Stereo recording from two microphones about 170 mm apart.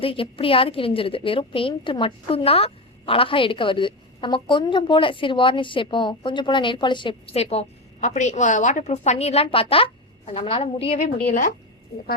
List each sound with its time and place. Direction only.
0.0 s a woman's voice: 30° left (ahead or behind)